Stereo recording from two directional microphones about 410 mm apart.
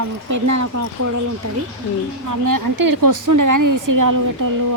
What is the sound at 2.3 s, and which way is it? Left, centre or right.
Speech, right.